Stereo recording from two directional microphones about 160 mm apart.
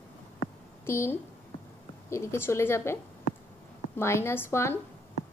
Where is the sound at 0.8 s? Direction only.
15° left (ahead or behind).